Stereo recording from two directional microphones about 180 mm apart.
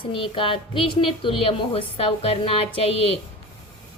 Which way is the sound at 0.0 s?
30° left (ahead or behind).